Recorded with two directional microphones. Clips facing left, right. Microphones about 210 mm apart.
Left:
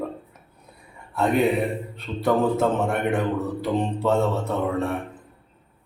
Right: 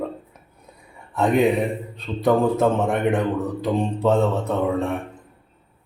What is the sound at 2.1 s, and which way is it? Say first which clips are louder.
Speech: right 2 dB; 15° right (ahead or behind).